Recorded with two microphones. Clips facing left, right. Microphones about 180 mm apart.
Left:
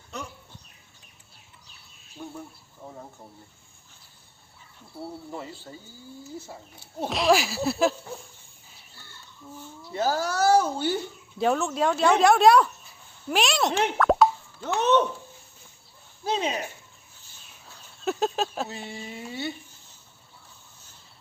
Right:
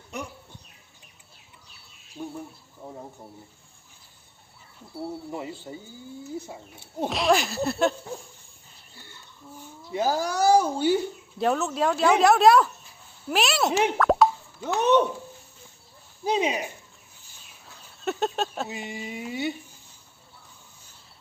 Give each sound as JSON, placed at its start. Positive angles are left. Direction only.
{"t": 2.2, "sound": "speech", "side_deg": -15}
{"t": 5.3, "sound": "speech", "side_deg": -15}
{"t": 7.1, "sound": "speech", "side_deg": 0}
{"t": 9.6, "sound": "speech", "side_deg": -15}
{"t": 13.2, "sound": "plop", "side_deg": -5}
{"t": 16.2, "sound": "speech", "side_deg": -10}
{"t": 17.7, "sound": "a sound", "side_deg": 0}
{"t": 18.7, "sound": "speech", "side_deg": -15}